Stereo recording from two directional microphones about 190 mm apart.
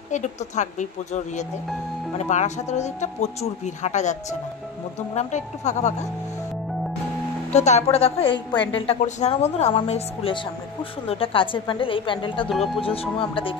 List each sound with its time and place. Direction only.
0.1 s speech: 40° left (ahead or behind)
7.5 s a woman's voice: 35° left (ahead or behind)
12.4 s speech: centre (ahead or behind)
12.8 s a woman's voice: 30° left (ahead or behind)